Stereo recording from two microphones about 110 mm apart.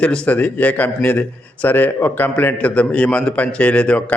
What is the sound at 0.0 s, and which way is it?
A man's voice, 10° left (ahead or behind).